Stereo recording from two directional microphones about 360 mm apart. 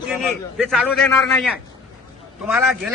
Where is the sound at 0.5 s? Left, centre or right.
Centre.